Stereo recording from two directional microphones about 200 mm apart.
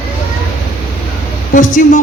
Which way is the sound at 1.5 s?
40° left (ahead or behind).